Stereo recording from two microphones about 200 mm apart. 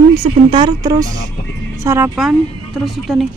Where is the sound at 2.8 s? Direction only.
Centre (ahead or behind).